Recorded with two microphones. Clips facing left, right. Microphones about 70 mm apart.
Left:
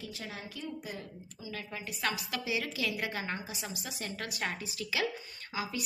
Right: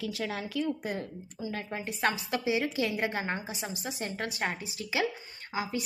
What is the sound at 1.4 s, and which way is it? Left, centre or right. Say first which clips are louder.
A woman's voice: right 6 dB; right.